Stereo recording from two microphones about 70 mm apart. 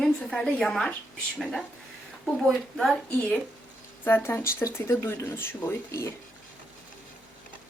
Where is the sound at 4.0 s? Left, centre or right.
Left.